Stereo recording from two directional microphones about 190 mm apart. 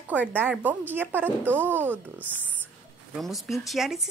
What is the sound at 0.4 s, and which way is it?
A woman's voice, 10° right (ahead or behind).